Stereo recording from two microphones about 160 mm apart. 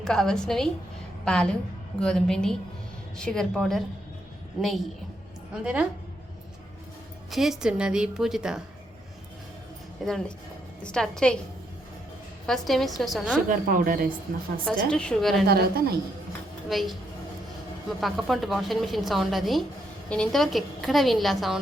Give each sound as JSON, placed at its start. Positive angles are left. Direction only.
{"t": 0.0, "sound": "a woman's voice", "side_deg": 5}
{"t": 7.3, "sound": "a woman's voice", "side_deg": 0}
{"t": 10.0, "sound": "a woman's voice", "side_deg": 0}
{"t": 12.5, "sound": "a woman's voice", "side_deg": 0}
{"t": 13.5, "sound": "speech", "side_deg": -60}
{"t": 14.8, "sound": "a woman's voice", "side_deg": 5}
{"t": 15.4, "sound": "a woman's voice", "side_deg": -75}
{"t": 16.6, "sound": "a woman's voice", "side_deg": 0}